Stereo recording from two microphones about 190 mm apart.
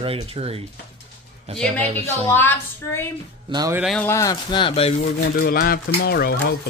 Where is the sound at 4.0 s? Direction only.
15° left (ahead or behind); by 5.1 s 30° left (ahead or behind).